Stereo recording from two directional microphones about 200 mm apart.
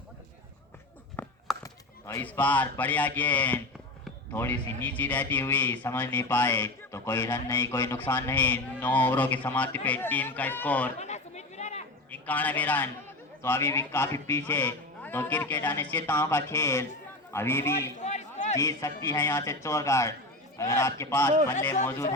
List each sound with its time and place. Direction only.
1.2 s a sound: 10° left (ahead or behind)
1.6 s a man's voice: 15° left (ahead or behind)
11.0 s chatter: 35° left (ahead or behind)
12.1 s a man's voice: 10° left (ahead or behind)
18.0 s a sound: 35° left (ahead or behind)
18.5 s a man's voice: 15° left (ahead or behind)